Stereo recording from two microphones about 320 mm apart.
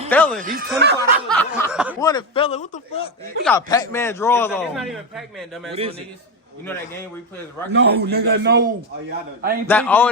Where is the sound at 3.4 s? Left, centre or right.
Centre.